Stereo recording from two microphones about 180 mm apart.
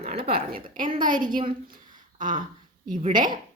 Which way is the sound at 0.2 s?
55° right (ahead or behind).